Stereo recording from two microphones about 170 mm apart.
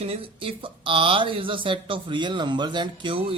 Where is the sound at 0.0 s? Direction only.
35° right (ahead or behind).